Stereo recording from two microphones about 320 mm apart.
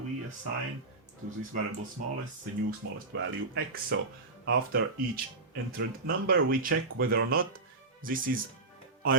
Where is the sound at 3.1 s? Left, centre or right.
Right.